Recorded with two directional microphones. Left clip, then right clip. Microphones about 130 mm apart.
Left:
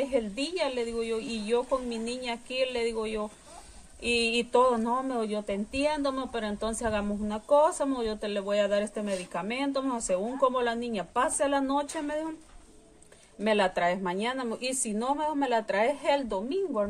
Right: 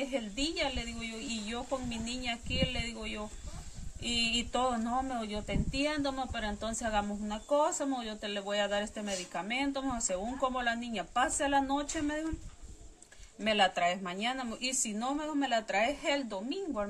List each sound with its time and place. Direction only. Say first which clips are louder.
0.0 s speech: left 6 dB; 30° left (ahead or behind)
13.4 s speech: left 3 dB; 30° left (ahead or behind)